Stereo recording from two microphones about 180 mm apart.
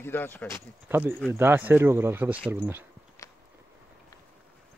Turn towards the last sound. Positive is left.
turn(degrees=15)  # may be behind; listen again after turning